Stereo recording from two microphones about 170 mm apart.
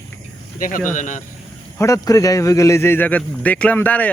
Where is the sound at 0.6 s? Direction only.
50° left (ahead or behind).